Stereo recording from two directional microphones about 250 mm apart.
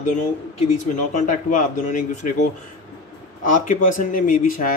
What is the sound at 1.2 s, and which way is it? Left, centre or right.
Speech, left.